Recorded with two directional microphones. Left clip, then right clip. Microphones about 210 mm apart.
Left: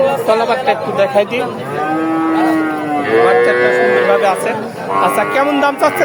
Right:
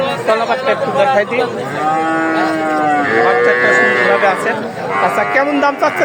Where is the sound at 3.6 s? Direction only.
45° left (ahead or behind).